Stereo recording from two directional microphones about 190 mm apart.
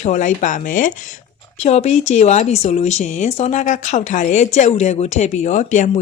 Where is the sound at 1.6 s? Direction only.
35° left (ahead or behind).